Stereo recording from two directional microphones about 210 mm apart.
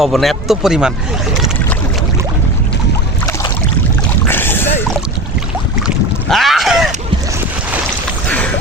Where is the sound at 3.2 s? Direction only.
15° left (ahead or behind).